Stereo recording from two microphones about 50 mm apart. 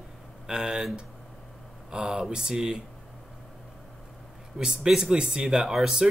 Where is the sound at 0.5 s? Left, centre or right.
Centre.